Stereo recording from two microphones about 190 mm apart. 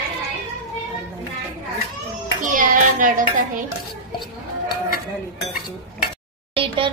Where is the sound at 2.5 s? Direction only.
45° right (ahead or behind).